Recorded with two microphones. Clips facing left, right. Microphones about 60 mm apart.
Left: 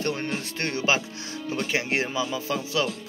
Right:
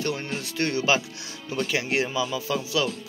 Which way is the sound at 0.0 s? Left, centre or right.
Left.